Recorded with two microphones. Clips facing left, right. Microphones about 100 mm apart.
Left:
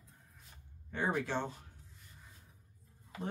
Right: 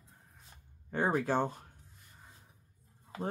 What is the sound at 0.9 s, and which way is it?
Speech, 45° right (ahead or behind).